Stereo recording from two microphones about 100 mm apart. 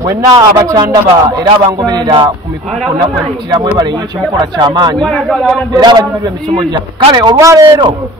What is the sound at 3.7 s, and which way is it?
Speech, 45° right (ahead or behind).